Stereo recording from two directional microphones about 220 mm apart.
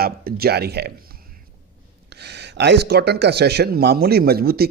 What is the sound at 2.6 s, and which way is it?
Speech, 50° right (ahead or behind).